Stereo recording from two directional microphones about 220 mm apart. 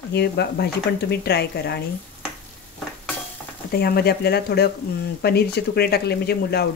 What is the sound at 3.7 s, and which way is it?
Speech, 45° left (ahead or behind).